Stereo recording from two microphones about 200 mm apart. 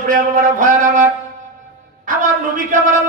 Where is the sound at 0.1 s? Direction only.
40° right (ahead or behind).